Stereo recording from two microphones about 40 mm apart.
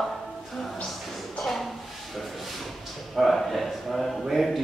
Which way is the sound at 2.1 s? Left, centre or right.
Centre.